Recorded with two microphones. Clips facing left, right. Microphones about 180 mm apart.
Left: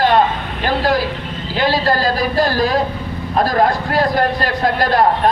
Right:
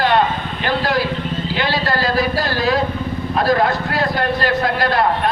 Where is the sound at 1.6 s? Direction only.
45° left (ahead or behind).